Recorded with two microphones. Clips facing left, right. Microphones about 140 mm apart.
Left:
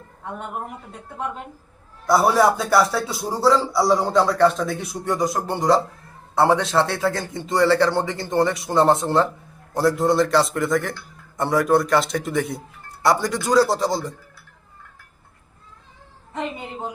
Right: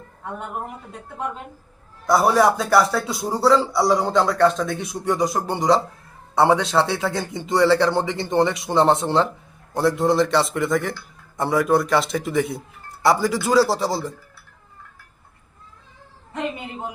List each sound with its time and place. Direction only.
2.0 s a man's voice: centre (ahead or behind)
8.1 s speech: 25° right (ahead or behind)
8.6 s a man's voice: centre (ahead or behind)